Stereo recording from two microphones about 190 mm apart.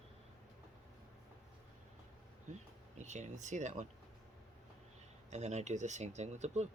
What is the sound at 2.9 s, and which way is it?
Speech, 40° right (ahead or behind).